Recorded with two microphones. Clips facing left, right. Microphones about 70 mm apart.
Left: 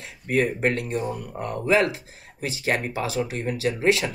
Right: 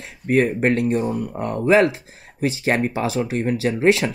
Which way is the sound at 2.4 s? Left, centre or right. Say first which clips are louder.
Right 6 dB; right.